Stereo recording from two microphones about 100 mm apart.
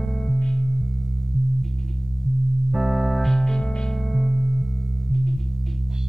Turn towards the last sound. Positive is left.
turn(degrees=-5)  # may be behind; listen again after turning